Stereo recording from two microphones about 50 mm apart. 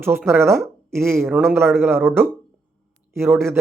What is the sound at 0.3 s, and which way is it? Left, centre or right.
A man's voice, right.